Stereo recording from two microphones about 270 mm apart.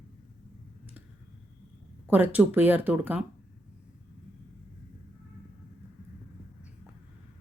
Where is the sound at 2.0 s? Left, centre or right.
Centre.